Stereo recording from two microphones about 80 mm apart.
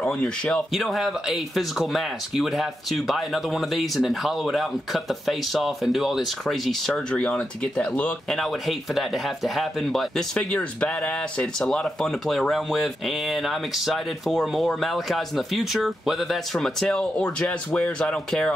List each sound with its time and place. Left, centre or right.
0.0 s speech: centre
0.7 s speech: centre
7.1 s speech: centre
8.4 s speech: centre
10.3 s speech: centre